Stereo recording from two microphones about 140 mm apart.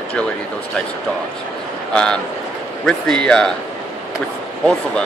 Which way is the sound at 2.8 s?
5° left (ahead or behind).